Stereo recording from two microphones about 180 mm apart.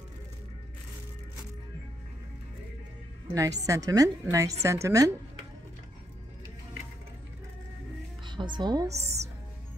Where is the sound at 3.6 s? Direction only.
20° right (ahead or behind).